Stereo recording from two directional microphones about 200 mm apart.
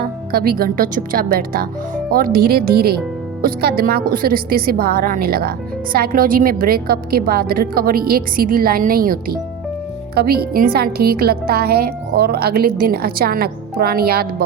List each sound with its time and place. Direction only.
0.0 s a woman's voice: 50° right (ahead or behind)